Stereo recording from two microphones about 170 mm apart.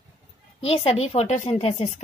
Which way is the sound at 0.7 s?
35° left (ahead or behind).